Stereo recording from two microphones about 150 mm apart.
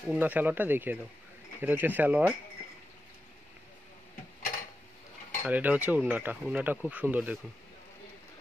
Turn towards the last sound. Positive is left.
turn(degrees=-10)  # may be behind; listen again after turning